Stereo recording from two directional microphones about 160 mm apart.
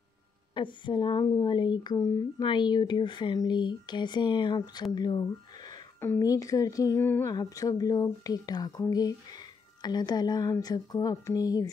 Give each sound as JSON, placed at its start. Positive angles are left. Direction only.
{"t": 0.6, "sound": "speech", "side_deg": 30}
{"t": 5.9, "sound": "speech", "side_deg": 15}